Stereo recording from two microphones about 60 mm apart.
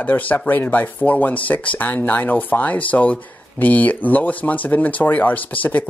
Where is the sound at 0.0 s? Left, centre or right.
Left.